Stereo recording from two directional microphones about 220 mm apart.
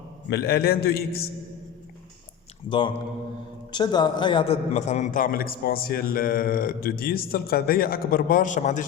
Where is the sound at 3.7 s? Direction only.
20° left (ahead or behind).